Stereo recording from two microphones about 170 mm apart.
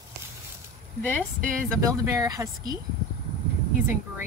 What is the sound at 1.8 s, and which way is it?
Speech, 20° right (ahead or behind).